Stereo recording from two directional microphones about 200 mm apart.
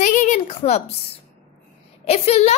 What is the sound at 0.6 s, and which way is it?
Speech, 35° left (ahead or behind).